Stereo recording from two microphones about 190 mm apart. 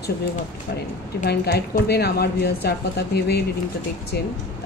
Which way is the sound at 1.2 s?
55° left (ahead or behind).